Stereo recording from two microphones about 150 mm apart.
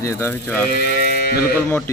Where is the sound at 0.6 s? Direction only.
90° left.